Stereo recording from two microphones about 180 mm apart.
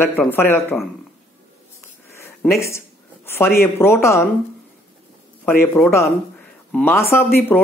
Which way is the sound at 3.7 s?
15° left (ahead or behind).